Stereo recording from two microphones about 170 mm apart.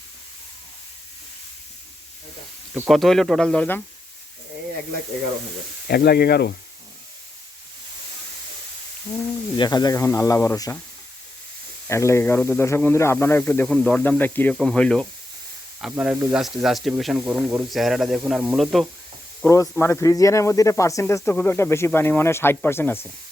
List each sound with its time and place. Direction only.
2.9 s speech: centre (ahead or behind)
5.9 s speech: 70° left (ahead or behind)
9.6 s speech: 25° left (ahead or behind)
11.9 s speech: 15° left (ahead or behind); by 18.9 s centre (ahead or behind)
19.5 s speech: 15° left (ahead or behind)